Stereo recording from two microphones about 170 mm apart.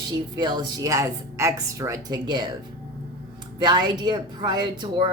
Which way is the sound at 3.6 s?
25° right (ahead or behind).